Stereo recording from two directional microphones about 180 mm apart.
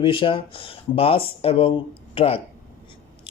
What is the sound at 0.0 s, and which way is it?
Speech, 30° left (ahead or behind).